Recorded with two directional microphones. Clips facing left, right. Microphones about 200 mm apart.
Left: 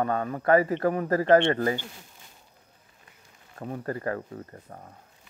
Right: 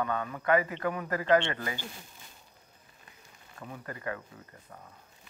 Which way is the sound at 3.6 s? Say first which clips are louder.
Left 8 dB; 45° left (ahead or behind).